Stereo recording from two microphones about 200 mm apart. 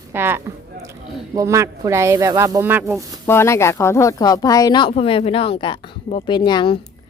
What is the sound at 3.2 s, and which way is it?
Speech, 15° left (ahead or behind).